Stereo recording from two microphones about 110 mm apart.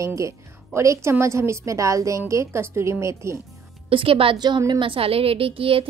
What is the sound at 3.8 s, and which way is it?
A woman's voice, 55° right (ahead or behind).